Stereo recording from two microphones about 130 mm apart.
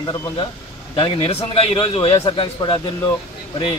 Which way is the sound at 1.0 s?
45° left (ahead or behind).